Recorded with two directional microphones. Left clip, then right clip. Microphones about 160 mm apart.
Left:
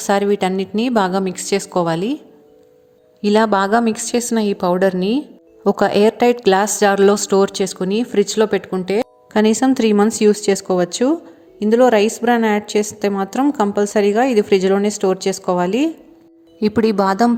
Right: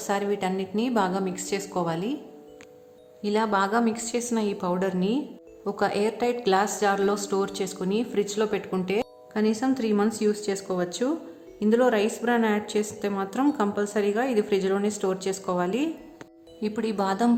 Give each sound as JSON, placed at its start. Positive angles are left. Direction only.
{"t": 0.0, "sound": "a woman's voice", "side_deg": 45}
{"t": 3.2, "sound": "a woman's voice", "side_deg": 45}
{"t": 9.3, "sound": "a woman's voice", "side_deg": 50}